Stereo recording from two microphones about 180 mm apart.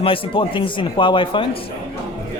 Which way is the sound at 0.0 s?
30° left (ahead or behind).